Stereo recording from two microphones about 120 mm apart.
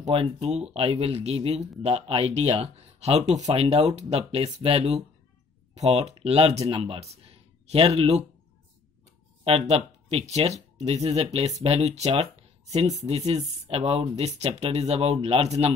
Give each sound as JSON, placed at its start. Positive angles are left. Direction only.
{"t": 0.0, "sound": "speech", "side_deg": -55}
{"t": 3.6, "sound": "speech", "side_deg": -60}
{"t": 9.4, "sound": "speech", "side_deg": -55}